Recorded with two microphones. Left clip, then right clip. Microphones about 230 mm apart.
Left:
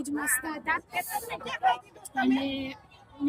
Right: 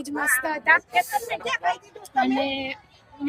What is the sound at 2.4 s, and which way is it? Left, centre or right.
Speech, centre.